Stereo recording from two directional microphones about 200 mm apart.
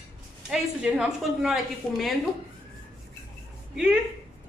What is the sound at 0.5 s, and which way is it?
A woman's voice, 5° right (ahead or behind).